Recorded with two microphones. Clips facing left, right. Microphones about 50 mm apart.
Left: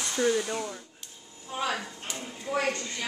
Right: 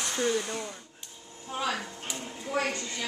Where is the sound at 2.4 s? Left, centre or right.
Centre.